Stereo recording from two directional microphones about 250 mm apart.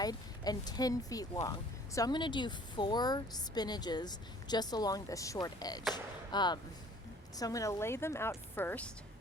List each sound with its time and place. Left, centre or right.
0.0 s a woman's voice: centre